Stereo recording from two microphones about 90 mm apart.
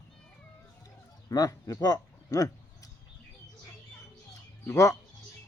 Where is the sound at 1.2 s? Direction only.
40° left (ahead or behind).